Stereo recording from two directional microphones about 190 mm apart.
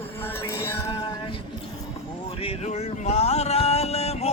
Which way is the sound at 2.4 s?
30° left (ahead or behind).